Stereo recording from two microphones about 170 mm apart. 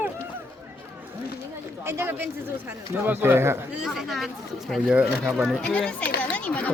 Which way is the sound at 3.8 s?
Centre (ahead or behind).